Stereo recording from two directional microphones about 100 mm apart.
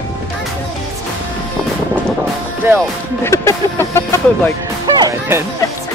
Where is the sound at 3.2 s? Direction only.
25° left (ahead or behind).